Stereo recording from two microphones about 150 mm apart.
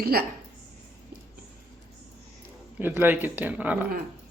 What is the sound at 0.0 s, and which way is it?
Speech, 90° right.